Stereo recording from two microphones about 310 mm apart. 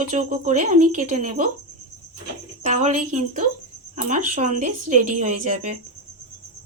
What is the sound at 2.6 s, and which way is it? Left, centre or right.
Speech, right.